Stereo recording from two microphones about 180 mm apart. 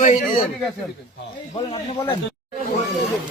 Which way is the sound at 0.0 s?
45° left (ahead or behind).